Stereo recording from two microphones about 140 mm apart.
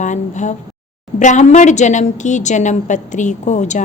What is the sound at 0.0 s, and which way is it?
A woman's voice, 60° left (ahead or behind).